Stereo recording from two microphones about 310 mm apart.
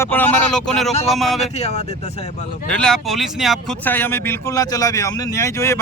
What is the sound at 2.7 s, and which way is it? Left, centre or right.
Speech, centre.